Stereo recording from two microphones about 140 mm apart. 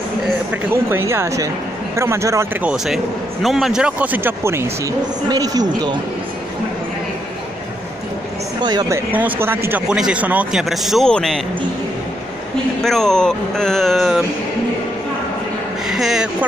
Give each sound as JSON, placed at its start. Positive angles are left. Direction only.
{"t": 0.8, "sound": "speech", "side_deg": -20}
{"t": 2.6, "sound": "speech", "side_deg": -5}
{"t": 8.6, "sound": "speech", "side_deg": -25}
{"t": 12.8, "sound": "speech", "side_deg": 5}
{"t": 15.9, "sound": "speech", "side_deg": -5}